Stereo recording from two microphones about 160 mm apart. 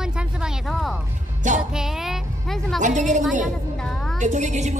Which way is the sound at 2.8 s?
50° right (ahead or behind).